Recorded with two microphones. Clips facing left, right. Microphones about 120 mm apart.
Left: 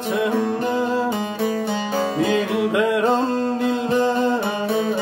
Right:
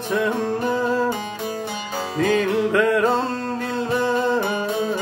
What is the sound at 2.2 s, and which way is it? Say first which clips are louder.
Music: right 4 dB; 20° left (ahead or behind).